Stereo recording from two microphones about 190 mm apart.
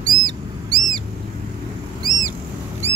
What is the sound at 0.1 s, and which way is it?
Bird, 20° right (ahead or behind).